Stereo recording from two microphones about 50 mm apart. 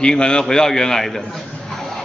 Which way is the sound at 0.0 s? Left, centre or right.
Centre.